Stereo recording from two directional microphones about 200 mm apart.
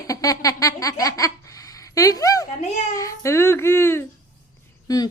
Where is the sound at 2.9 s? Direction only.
15° left (ahead or behind).